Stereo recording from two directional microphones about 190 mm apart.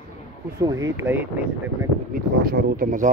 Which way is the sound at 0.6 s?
15° right (ahead or behind).